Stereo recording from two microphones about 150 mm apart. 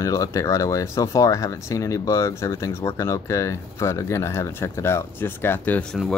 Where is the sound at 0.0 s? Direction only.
20° left (ahead or behind).